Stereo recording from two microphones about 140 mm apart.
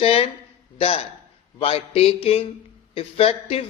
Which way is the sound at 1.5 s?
45° left (ahead or behind).